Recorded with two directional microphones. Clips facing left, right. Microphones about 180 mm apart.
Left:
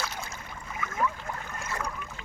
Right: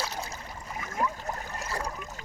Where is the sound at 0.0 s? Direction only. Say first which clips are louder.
Right 2 dB; 35° right (ahead or behind).